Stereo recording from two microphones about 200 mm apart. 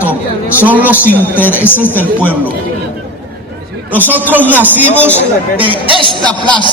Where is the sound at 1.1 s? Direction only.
10° left (ahead or behind).